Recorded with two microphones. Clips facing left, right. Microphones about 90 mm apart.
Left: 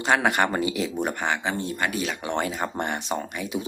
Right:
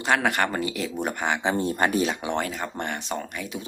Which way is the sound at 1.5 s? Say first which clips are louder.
Right 4 dB; 35° right (ahead or behind).